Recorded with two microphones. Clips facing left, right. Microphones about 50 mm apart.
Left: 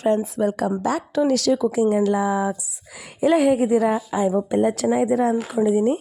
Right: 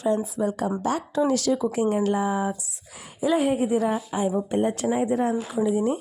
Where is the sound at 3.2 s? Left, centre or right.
Left.